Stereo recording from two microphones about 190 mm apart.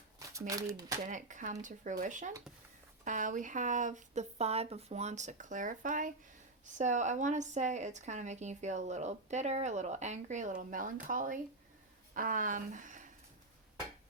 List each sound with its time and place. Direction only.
0.2 s speech: 20° right (ahead or behind)
0.9 s speech: 40° right (ahead or behind)